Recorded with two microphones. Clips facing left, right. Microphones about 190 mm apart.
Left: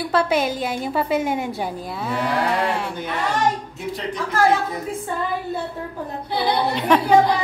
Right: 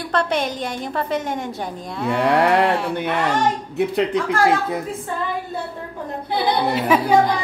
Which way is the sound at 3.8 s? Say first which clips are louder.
Right 8 dB; 65° right (ahead or behind).